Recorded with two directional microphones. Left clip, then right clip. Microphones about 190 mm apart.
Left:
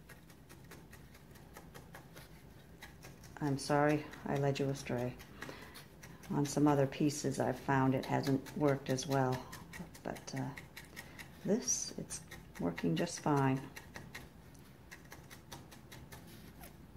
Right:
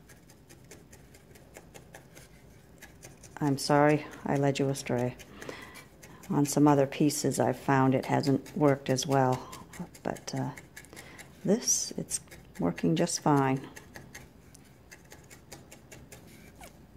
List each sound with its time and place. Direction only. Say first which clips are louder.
3.3 s speech: right 8 dB; 45° right (ahead or behind)